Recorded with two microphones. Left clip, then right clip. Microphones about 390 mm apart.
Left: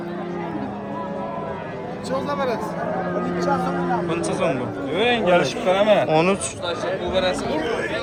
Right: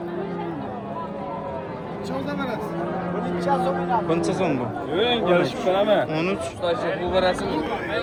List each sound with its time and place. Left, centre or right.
4.1 s speech: centre
4.9 s speech: left
6.1 s speech: centre
6.7 s speech: centre